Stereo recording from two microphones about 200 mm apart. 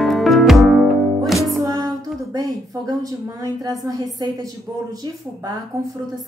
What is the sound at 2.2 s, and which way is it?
Speech, 15° right (ahead or behind).